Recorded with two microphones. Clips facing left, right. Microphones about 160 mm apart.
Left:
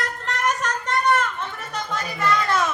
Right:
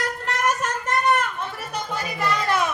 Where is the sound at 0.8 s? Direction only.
10° right (ahead or behind).